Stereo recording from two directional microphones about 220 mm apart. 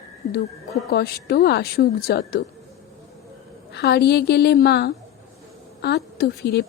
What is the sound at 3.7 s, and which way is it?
A woman's voice, 45° left (ahead or behind).